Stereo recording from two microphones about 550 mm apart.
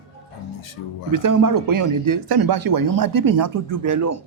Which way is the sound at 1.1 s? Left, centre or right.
Right.